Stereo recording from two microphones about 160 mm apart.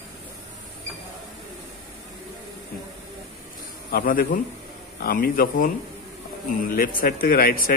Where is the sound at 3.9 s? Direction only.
65° left (ahead or behind).